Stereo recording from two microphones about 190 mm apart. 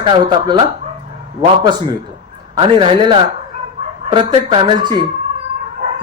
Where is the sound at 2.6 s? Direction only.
25° right (ahead or behind).